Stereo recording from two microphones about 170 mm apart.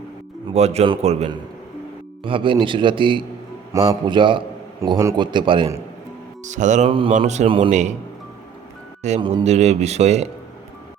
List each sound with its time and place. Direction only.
0.5 s a man's voice: 40° right (ahead or behind)
4.8 s a man's voice: 20° right (ahead or behind)
6.4 s mantra: 45° right (ahead or behind)
7.3 s a man's voice: 35° right (ahead or behind)
7.7 s mantra: 45° right (ahead or behind)
9.2 s a man's voice: 40° right (ahead or behind)